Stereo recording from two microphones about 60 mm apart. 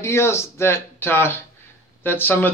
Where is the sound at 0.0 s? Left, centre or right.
Left.